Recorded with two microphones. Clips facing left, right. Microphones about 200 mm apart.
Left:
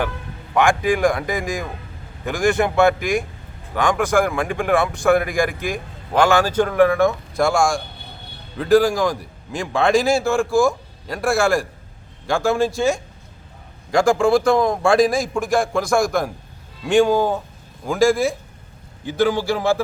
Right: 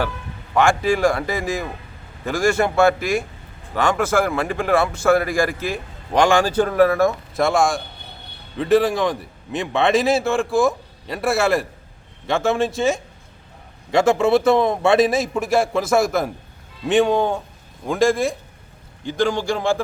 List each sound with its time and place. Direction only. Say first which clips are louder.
0.6 s speech: even; 15° left (ahead or behind)
2.4 s a man's voice: even; centre (ahead or behind)
4.0 s a man's voice: left 1 dB; 15° left (ahead or behind)
6.4 s a man's voice: even; 10° right (ahead or behind)